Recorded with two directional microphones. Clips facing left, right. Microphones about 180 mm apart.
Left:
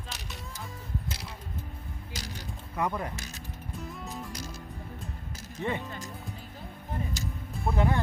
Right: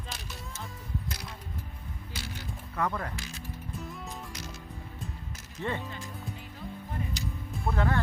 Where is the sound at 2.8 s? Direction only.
15° left (ahead or behind).